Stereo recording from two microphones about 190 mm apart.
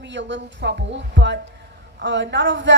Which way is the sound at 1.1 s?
70° right (ahead or behind).